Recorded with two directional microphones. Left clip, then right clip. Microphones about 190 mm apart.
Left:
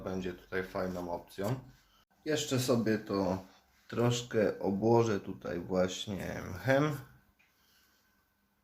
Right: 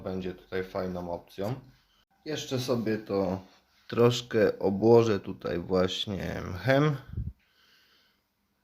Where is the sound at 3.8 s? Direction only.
40° right (ahead or behind).